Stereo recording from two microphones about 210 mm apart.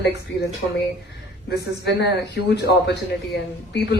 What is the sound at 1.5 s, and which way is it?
A woman's voice, 55° left (ahead or behind).